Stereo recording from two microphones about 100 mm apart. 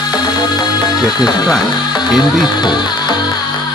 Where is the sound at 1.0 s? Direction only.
45° left (ahead or behind).